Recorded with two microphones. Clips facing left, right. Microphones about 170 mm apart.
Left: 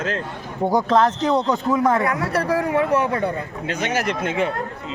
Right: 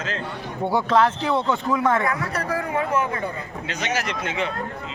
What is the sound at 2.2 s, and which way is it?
Speech, 65° left (ahead or behind).